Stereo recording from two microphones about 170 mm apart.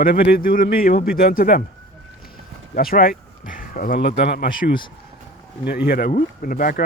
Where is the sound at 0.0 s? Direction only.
65° left (ahead or behind).